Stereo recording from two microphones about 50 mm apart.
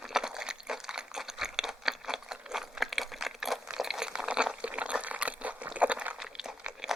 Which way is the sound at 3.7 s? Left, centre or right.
Centre.